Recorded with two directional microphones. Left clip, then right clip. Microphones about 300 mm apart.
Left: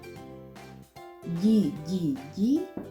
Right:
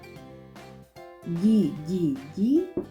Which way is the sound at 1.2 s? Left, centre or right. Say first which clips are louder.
Right 2 dB; centre.